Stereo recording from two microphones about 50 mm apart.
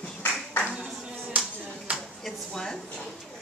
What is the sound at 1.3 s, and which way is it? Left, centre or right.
Clapping, right.